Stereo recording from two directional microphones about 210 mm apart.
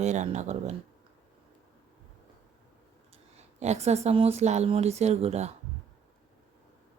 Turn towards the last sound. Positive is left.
turn(degrees=-30)  # may be behind; listen again after turning